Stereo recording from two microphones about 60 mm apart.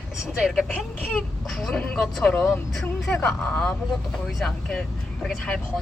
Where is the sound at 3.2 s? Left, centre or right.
Centre.